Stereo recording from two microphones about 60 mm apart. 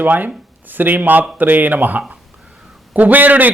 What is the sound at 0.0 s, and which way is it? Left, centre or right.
A man's voice, right.